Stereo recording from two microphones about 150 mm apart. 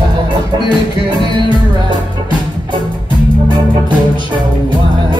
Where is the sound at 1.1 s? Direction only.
30° right (ahead or behind).